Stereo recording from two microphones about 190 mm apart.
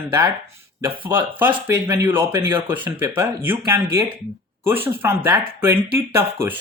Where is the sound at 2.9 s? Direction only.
15° right (ahead or behind).